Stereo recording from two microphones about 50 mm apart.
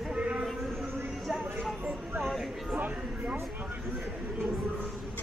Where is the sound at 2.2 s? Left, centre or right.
Centre.